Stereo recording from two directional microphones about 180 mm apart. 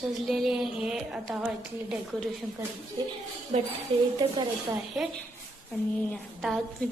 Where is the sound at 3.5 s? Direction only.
40° right (ahead or behind).